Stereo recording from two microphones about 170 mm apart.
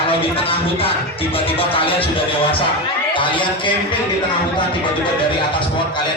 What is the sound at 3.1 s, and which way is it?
Music, 30° left (ahead or behind).